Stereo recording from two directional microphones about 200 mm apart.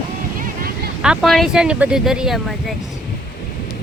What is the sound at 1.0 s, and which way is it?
Speech, centre (ahead or behind).